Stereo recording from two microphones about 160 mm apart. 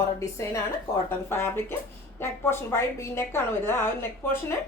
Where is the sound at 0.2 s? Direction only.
20° left (ahead or behind).